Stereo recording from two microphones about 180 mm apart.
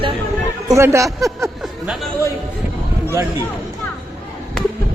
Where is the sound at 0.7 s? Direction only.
15° right (ahead or behind).